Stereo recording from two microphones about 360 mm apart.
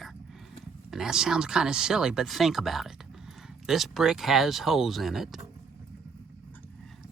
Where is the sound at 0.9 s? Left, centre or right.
Centre.